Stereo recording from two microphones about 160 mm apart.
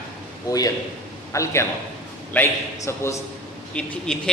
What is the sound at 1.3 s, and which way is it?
A man's voice, 20° left (ahead or behind).